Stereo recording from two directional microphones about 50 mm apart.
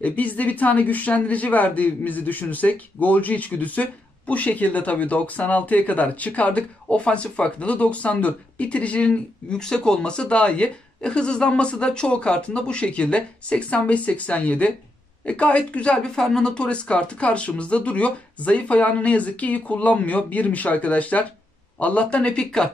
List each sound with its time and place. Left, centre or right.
0.0 s a woman's voice: left; by 22.7 s centre